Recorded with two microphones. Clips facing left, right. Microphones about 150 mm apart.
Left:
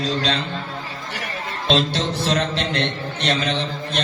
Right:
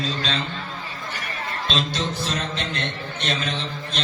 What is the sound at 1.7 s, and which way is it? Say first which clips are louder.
A man's voice: left 7 dB; 70° left (ahead or behind).